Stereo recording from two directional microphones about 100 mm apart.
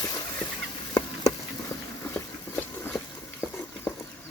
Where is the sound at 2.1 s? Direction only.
20° left (ahead or behind).